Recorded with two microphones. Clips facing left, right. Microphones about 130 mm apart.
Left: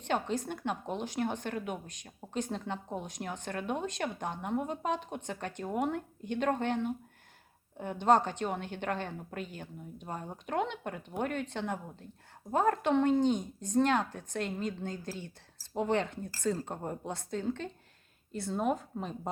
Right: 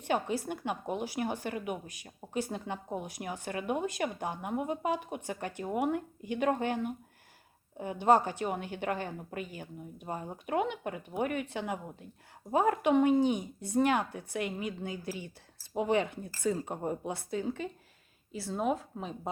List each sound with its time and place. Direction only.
0.0 s speech: 10° right (ahead or behind)